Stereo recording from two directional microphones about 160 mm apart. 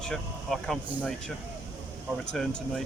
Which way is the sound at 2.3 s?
5° left (ahead or behind).